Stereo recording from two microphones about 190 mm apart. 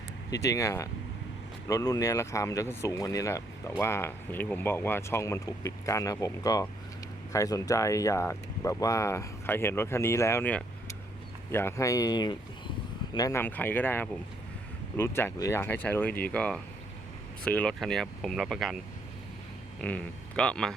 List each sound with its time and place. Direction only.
0.3 s speech: 15° left (ahead or behind); by 18.8 s centre (ahead or behind)
19.8 s speech: 5° left (ahead or behind)